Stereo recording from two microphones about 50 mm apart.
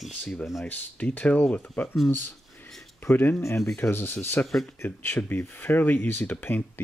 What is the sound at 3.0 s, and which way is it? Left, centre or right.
Speech, left.